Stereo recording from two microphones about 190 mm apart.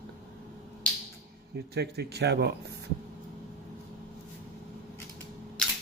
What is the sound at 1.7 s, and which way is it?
Speech, 60° right (ahead or behind).